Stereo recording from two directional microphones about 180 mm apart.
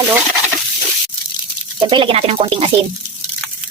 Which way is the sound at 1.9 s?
30° right (ahead or behind).